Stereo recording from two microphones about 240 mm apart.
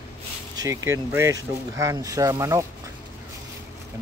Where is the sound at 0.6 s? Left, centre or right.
Centre.